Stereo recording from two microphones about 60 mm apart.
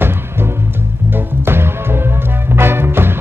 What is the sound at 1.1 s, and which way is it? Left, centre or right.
Music, right.